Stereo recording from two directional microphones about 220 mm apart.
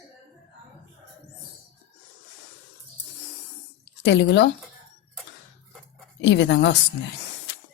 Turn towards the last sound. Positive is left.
turn(degrees=50)  # may be behind; listen again after turning